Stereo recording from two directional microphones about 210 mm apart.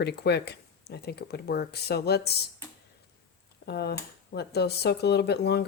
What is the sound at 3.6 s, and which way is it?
Speech, 50° left (ahead or behind).